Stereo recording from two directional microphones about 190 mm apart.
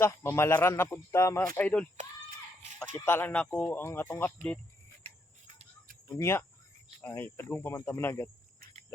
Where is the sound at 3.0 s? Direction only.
10° left (ahead or behind).